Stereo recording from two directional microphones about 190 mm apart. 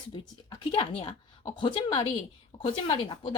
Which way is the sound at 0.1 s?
25° left (ahead or behind).